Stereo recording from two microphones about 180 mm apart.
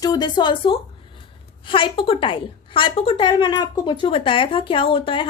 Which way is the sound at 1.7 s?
30° left (ahead or behind).